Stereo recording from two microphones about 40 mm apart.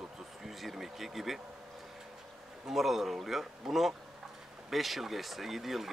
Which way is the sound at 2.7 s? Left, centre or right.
Centre.